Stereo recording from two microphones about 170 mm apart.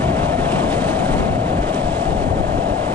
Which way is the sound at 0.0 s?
10° left (ahead or behind).